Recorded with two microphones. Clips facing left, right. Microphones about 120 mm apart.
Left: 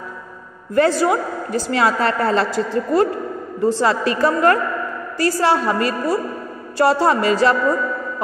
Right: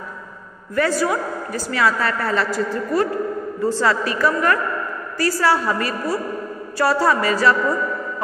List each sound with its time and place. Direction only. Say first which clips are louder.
0.7 s a woman's voice: left 4 dB; 25° left (ahead or behind)
4.2 s a woman's voice: left 4 dB; 30° left (ahead or behind)
5.1 s a woman's voice: left 2 dB; 20° left (ahead or behind)